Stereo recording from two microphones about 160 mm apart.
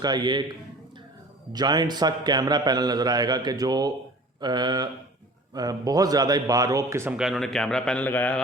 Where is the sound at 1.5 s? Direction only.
25° right (ahead or behind).